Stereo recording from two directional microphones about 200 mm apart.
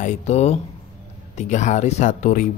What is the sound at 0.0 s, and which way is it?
Speech, 35° left (ahead or behind).